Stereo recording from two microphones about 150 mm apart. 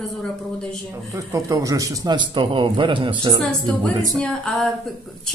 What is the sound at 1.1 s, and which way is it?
Speech, 20° right (ahead or behind).